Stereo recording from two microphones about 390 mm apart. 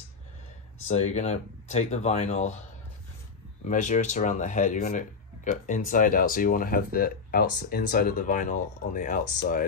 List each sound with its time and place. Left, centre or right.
0.8 s speech: centre
3.6 s speech: centre